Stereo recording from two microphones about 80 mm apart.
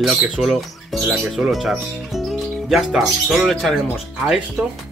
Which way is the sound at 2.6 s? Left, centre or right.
Centre.